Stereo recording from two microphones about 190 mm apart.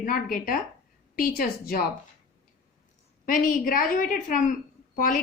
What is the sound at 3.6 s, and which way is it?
Speech, 45° left (ahead or behind).